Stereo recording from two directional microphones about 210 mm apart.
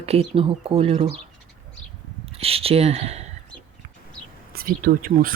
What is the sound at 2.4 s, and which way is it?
Speech, 25° right (ahead or behind).